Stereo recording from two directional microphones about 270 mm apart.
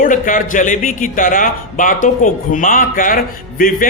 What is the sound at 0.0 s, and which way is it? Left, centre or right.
A man's voice, left.